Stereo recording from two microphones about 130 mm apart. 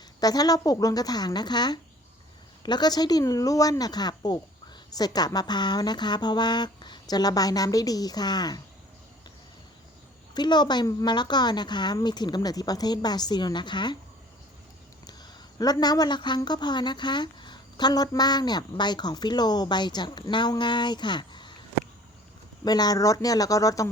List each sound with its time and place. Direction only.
0.2 s speech: 30° left (ahead or behind)
10.3 s speech: 35° left (ahead or behind)
15.0 s speech: 30° left (ahead or behind)
22.6 s speech: 30° left (ahead or behind)